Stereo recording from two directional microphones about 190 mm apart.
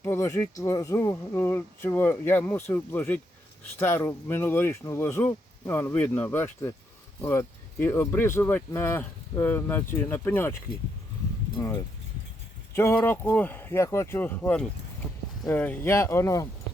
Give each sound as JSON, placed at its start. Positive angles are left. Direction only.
{"t": 0.0, "sound": "speech", "side_deg": 15}
{"t": 11.5, "sound": "speech", "side_deg": 20}